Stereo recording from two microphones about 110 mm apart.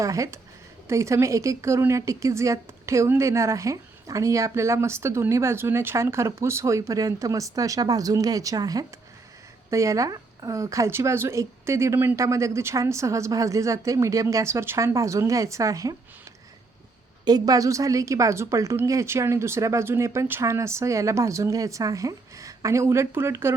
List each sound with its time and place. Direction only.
0.0 s a woman's voice: 30° right (ahead or behind)
17.2 s a woman's voice: 35° right (ahead or behind)